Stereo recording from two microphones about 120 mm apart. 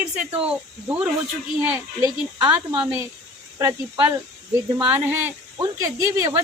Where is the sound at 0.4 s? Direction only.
10° right (ahead or behind).